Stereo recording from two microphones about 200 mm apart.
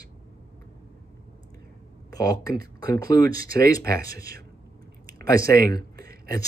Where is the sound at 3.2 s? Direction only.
45° right (ahead or behind).